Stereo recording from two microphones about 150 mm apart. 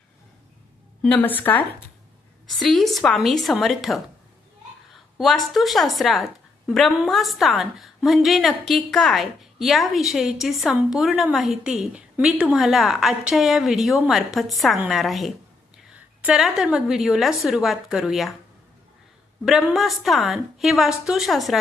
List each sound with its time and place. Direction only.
1.0 s a woman's voice: 10° left (ahead or behind)
2.6 s a woman's voice: centre (ahead or behind)
5.1 s a woman's voice: centre (ahead or behind)
19.5 s a woman's voice: centre (ahead or behind)